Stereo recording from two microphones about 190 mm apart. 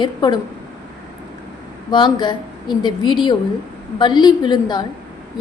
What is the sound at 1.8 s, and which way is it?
A woman's voice, 25° left (ahead or behind).